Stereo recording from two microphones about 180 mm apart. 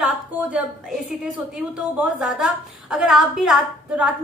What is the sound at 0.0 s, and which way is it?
A woman's voice, 5° right (ahead or behind).